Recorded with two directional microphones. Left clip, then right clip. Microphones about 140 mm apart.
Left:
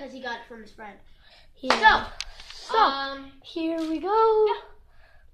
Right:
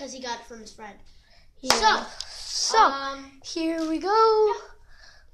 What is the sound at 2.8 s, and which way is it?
A woman's voice, 25° right (ahead or behind).